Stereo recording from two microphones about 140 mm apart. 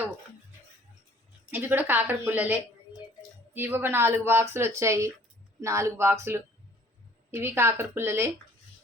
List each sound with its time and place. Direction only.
1.5 s speech: 15° right (ahead or behind)